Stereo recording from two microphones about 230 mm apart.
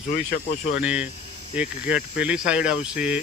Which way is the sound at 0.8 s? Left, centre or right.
Centre.